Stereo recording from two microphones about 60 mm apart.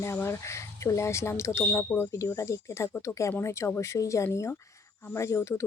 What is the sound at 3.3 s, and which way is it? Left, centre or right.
Speech, left.